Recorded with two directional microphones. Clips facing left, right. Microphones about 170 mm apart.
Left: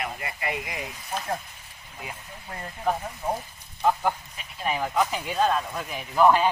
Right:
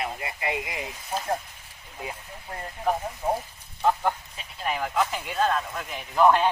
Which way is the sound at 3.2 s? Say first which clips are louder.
Right 2 dB; 25° right (ahead or behind).